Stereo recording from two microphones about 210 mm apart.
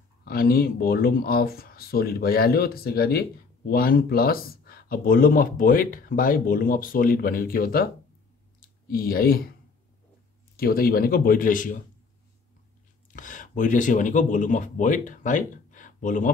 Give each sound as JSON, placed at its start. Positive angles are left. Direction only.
{"t": 0.2, "sound": "speech", "side_deg": 45}
{"t": 10.5, "sound": "speech", "side_deg": 45}
{"t": 13.1, "sound": "speech", "side_deg": 40}